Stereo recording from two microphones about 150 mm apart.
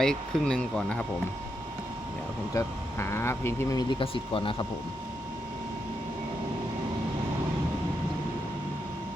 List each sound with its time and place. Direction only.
0.0 s speech: 5° left (ahead or behind)
2.6 s speech: 15° left (ahead or behind); by 4.5 s 35° left (ahead or behind)